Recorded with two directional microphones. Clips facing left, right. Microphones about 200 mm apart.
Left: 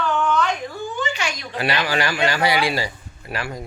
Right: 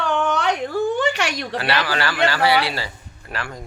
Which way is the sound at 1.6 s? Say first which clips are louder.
Left 2 dB; 15° left (ahead or behind).